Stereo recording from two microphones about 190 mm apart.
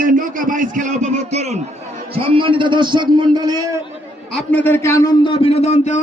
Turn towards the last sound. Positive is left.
turn(degrees=35)  # may be behind; listen again after turning